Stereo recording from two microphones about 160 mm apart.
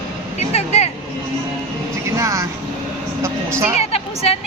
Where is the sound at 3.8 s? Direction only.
40° left (ahead or behind).